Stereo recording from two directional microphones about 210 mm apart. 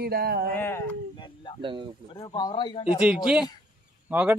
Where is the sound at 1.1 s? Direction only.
20° left (ahead or behind).